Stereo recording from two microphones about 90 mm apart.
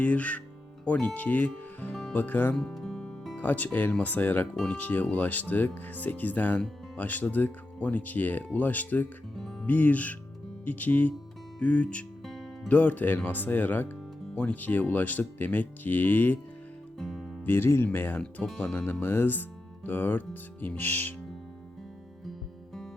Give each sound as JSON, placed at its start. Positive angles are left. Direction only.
{"t": 0.0, "sound": "speech", "side_deg": 15}
{"t": 2.6, "sound": "music", "side_deg": 5}
{"t": 3.3, "sound": "speech", "side_deg": 20}
{"t": 9.3, "sound": "music", "side_deg": 5}
{"t": 9.6, "sound": "speech", "side_deg": 20}
{"t": 12.2, "sound": "music", "side_deg": 5}
{"t": 12.6, "sound": "speech", "side_deg": 20}
{"t": 17.0, "sound": "music", "side_deg": 0}
{"t": 17.4, "sound": "speech", "side_deg": 25}
{"t": 19.0, "sound": "speech", "side_deg": 25}